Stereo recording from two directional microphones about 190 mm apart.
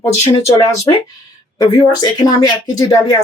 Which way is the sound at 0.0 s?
15° left (ahead or behind).